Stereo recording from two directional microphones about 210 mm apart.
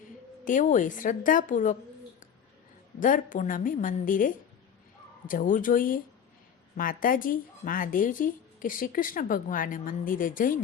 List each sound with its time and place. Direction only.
0.4 s a woman's voice: 40° left (ahead or behind)
3.0 s a woman's voice: 40° left (ahead or behind)